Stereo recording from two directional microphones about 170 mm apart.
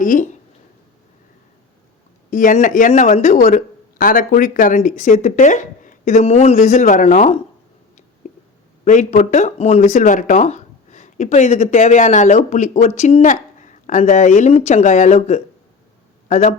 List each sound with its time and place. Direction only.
0.0 s speech: 50° left (ahead or behind)
2.3 s speech: 50° left (ahead or behind)
8.8 s speech: 45° left (ahead or behind)